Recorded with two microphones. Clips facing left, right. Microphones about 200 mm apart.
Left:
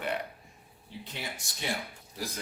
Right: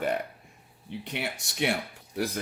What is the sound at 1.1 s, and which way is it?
Speech, 70° right (ahead or behind).